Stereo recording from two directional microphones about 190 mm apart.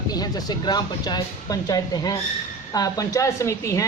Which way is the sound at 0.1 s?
20° left (ahead or behind).